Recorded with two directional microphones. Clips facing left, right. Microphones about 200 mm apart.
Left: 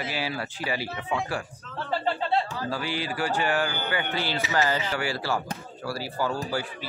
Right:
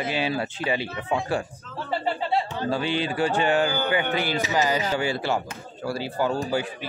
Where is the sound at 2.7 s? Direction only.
25° right (ahead or behind).